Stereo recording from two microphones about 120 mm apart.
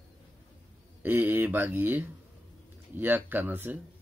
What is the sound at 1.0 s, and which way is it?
Speech, 15° right (ahead or behind).